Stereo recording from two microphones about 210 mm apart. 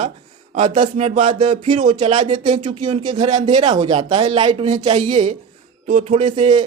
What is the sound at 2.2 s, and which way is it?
Speech, 20° right (ahead or behind).